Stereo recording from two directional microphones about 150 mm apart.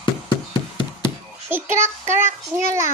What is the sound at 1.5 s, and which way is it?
A child's voice, 15° right (ahead or behind).